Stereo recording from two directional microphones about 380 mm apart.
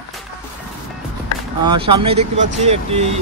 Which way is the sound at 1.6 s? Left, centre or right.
Centre.